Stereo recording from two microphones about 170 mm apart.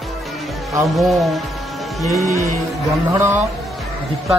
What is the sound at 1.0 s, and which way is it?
Speech, centre (ahead or behind).